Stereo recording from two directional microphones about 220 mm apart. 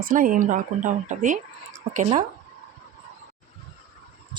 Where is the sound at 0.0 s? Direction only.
40° right (ahead or behind).